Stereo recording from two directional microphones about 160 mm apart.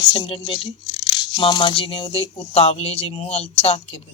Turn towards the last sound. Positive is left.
turn(degrees=35)  # may be behind; listen again after turning